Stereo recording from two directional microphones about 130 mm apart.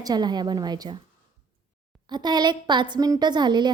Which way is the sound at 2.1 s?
35° right (ahead or behind).